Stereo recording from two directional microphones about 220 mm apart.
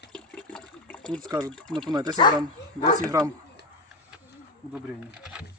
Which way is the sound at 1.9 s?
20° right (ahead or behind).